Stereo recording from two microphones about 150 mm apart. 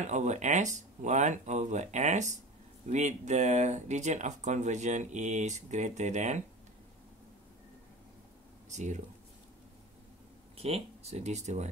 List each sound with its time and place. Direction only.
0.0 s speech: 50° right (ahead or behind)
8.6 s speech: 55° right (ahead or behind)
10.6 s speech: 45° right (ahead or behind)